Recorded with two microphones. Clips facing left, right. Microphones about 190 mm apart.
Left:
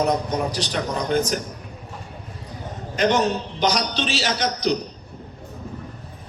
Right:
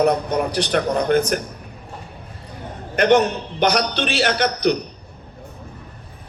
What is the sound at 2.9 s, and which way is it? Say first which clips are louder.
A man's voice: right 4 dB; 60° right (ahead or behind).